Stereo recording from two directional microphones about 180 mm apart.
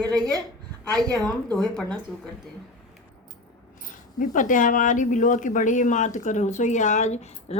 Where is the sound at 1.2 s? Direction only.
Centre (ahead or behind).